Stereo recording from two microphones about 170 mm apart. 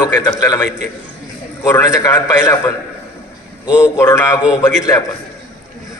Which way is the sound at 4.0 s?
20° left (ahead or behind).